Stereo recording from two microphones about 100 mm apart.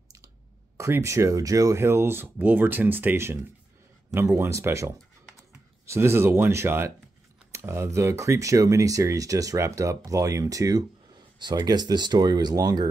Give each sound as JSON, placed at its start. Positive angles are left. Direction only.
{"t": 0.7, "sound": "speech", "side_deg": -30}